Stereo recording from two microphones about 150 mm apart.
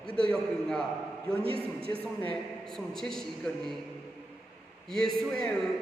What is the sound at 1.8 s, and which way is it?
Speech, 40° right (ahead or behind).